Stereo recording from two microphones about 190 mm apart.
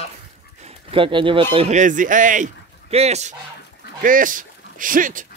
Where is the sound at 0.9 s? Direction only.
25° right (ahead or behind).